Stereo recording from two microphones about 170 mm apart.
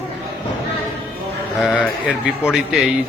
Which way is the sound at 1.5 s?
5° right (ahead or behind).